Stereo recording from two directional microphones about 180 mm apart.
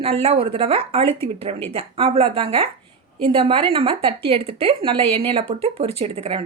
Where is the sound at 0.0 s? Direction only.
35° right (ahead or behind).